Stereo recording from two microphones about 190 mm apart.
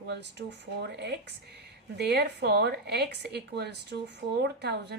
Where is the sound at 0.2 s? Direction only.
65° right (ahead or behind).